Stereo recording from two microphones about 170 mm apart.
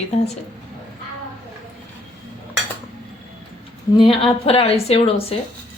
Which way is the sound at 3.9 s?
30° left (ahead or behind).